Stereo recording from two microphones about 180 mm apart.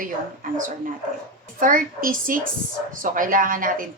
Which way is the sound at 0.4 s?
50° right (ahead or behind).